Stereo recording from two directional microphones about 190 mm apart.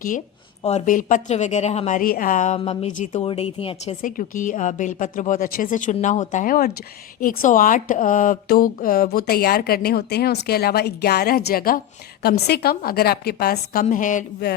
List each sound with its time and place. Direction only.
0.6 s a woman's voice: 40° left (ahead or behind)
4.0 s a woman's voice: 45° left (ahead or behind)
13.8 s a woman's voice: 40° left (ahead or behind)